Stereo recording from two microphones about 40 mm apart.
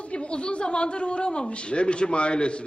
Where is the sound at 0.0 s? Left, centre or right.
Left.